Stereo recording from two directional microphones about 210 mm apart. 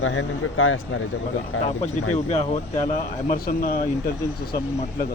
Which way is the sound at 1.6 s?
30° left (ahead or behind).